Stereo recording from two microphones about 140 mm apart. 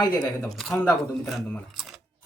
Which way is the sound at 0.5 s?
Centre (ahead or behind).